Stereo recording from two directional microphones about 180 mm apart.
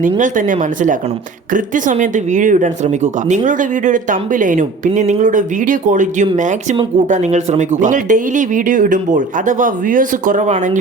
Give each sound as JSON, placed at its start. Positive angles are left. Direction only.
{"t": 0.2, "sound": "speech", "side_deg": -45}